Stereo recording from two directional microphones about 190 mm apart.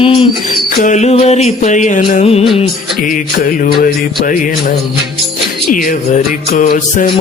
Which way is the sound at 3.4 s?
45° left (ahead or behind).